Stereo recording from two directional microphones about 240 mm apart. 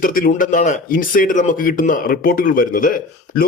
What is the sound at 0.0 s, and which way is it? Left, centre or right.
Speech, left.